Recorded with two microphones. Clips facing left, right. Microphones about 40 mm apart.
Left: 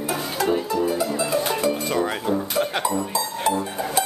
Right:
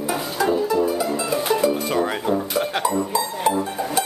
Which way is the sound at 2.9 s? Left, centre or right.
Centre.